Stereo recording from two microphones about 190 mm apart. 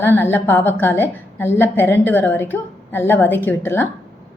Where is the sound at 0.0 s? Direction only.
10° left (ahead or behind).